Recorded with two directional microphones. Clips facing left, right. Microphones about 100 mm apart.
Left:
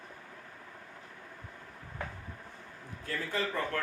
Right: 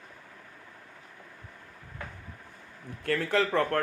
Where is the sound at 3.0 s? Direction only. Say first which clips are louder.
Right 8 dB; 70° right (ahead or behind).